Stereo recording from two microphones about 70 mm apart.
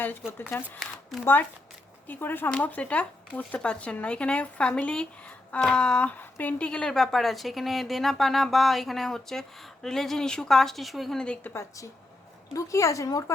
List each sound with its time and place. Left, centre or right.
0.3 s speech: left
0.8 s a sound: centre
1.2 s speech: left
2.6 s speech: centre
6.7 s speech: centre
11.4 s speech: left
12.5 s speech: left